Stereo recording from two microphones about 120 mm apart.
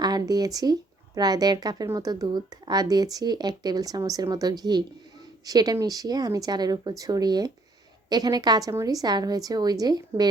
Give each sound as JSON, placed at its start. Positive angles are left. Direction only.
{"t": 0.0, "sound": "speech", "side_deg": -30}